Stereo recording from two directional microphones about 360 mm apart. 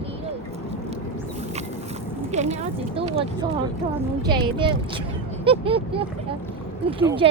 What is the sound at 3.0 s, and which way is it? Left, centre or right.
Speech, centre.